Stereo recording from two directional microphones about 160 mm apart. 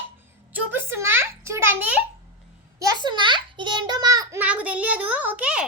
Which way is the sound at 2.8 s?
25° right (ahead or behind).